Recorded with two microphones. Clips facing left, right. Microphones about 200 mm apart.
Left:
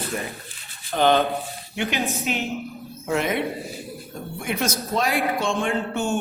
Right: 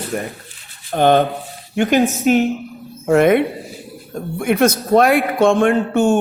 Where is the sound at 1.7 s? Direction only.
50° right (ahead or behind).